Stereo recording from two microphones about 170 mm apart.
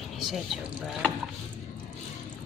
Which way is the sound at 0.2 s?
Centre (ahead or behind).